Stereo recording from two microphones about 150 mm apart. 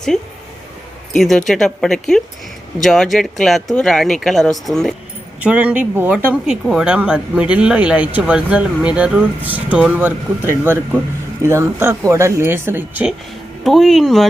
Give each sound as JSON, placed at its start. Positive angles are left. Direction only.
{"t": 1.1, "sound": "speech", "side_deg": 0}
{"t": 13.7, "sound": "speech", "side_deg": 0}